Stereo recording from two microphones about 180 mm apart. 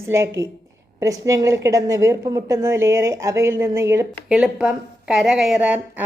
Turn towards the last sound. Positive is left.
turn(degrees=-5)  # may be behind; listen again after turning